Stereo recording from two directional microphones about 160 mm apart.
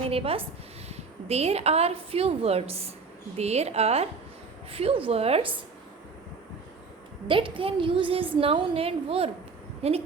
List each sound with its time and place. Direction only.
0.1 s a woman's voice: 35° right (ahead or behind)
7.3 s a woman's voice: 30° right (ahead or behind)